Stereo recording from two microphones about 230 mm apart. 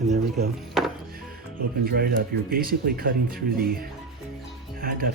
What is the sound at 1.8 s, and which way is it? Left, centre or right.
Speech, right.